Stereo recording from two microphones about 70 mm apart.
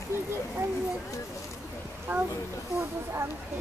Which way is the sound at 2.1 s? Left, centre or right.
Right.